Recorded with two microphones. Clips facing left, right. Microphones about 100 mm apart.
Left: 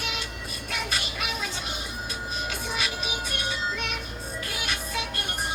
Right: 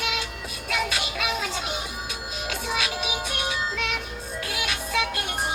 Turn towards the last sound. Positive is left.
turn(degrees=-90)